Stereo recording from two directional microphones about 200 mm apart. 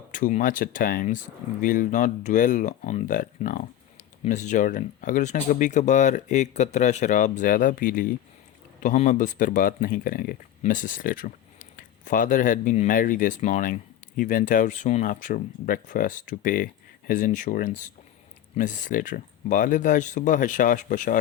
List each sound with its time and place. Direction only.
0.1 s speech: 40° left (ahead or behind)